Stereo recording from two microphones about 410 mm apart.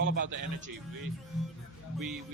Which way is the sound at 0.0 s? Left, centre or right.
Right.